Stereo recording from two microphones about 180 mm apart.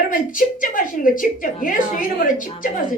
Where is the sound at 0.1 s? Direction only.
50° left (ahead or behind).